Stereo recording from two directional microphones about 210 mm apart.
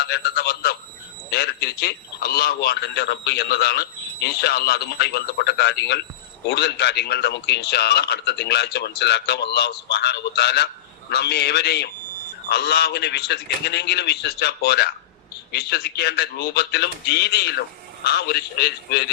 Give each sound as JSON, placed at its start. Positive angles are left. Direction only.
{"t": 0.0, "sound": "a man's voice", "side_deg": 50}